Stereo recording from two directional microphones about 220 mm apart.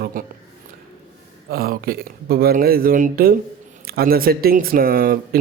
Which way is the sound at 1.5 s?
45° right (ahead or behind).